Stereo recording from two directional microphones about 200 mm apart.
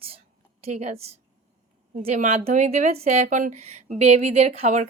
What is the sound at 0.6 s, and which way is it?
Speech, 30° right (ahead or behind).